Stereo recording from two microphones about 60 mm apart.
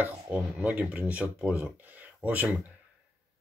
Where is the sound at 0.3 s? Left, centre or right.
Right.